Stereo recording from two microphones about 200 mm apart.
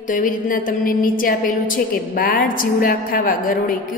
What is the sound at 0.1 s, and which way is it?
A woman's voice, 40° left (ahead or behind).